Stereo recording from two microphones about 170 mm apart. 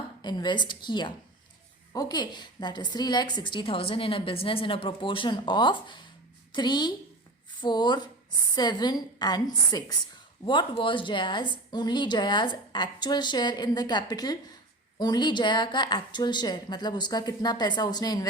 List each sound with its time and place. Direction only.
0.2 s a woman's voice: 25° left (ahead or behind)